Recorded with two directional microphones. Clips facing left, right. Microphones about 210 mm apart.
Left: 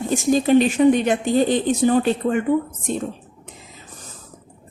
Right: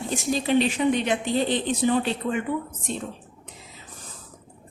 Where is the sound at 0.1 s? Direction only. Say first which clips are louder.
Left 7 dB; 45° left (ahead or behind).